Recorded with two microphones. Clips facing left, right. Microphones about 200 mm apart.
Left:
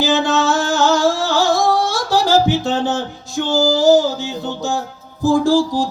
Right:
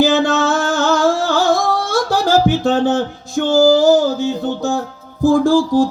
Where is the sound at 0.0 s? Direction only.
55° right (ahead or behind).